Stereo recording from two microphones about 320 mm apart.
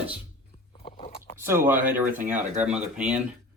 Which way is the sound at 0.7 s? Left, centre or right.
Centre.